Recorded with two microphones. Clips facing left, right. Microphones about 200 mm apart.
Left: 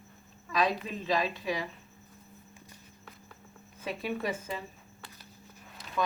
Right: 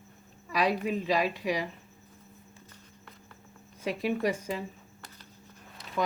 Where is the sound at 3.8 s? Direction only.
15° right (ahead or behind).